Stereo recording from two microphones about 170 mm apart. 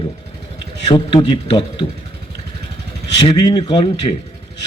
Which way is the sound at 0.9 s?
30° left (ahead or behind).